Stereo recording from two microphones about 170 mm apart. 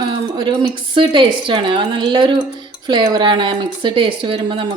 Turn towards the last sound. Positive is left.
turn(degrees=-30)  # may be behind; listen again after turning